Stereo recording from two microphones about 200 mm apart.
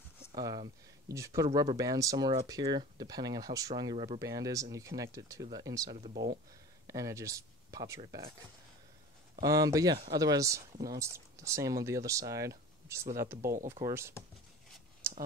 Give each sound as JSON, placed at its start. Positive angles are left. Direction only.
{"t": 0.4, "sound": "speech", "side_deg": -20}
{"t": 9.4, "sound": "speech", "side_deg": -20}
{"t": 15.0, "sound": "a sound", "side_deg": -15}